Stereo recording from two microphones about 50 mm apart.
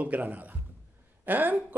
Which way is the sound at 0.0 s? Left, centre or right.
Right.